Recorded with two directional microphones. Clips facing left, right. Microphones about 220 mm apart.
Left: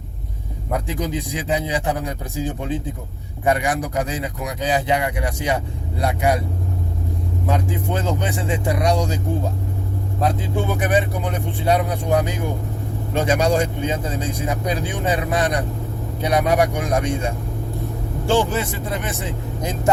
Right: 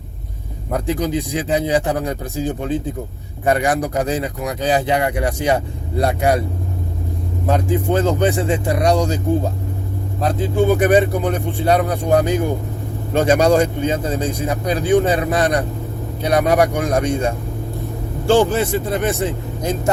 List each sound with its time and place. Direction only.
0.9 s speech: 35° right (ahead or behind)
7.4 s speech: 35° right (ahead or behind)
10.8 s speech: 35° right (ahead or behind)